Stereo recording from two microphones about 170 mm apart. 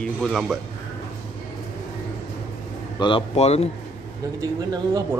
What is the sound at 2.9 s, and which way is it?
Speech, 30° left (ahead or behind).